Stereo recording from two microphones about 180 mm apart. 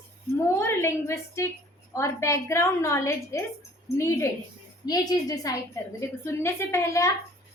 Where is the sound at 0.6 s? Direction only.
15° left (ahead or behind).